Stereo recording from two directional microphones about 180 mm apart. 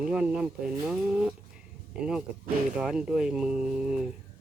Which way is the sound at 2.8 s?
5° right (ahead or behind).